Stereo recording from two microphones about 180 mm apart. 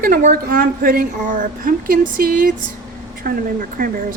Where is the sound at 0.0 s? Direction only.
50° right (ahead or behind).